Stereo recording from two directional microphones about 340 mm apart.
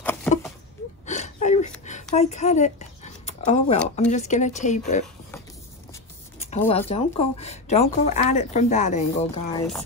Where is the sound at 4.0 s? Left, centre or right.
Centre.